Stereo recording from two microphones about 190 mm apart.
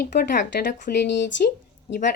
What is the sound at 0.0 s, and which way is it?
Speech, 55° left (ahead or behind).